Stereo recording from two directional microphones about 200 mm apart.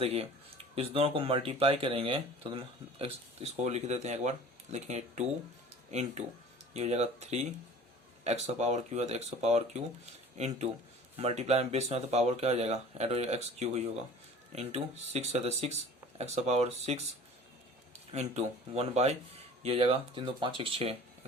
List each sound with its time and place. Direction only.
0.0 s speech: 30° right (ahead or behind)
18.1 s speech: 30° right (ahead or behind)